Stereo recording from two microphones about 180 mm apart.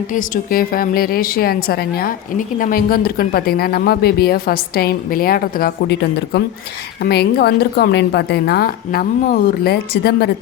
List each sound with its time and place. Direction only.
0.1 s speech: 50° left (ahead or behind)